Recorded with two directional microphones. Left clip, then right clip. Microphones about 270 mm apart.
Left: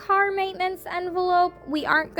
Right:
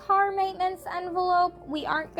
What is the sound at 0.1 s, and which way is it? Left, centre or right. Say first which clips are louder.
A woman's voice: left 2 dB; left.